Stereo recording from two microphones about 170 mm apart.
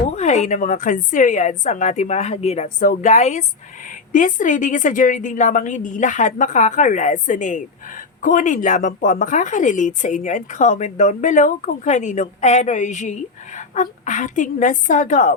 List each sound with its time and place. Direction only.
0.2 s speech: 40° left (ahead or behind)